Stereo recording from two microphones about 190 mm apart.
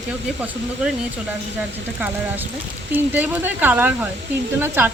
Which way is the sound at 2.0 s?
10° right (ahead or behind).